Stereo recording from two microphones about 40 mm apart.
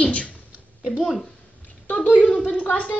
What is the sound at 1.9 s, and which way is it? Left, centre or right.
Speech, left.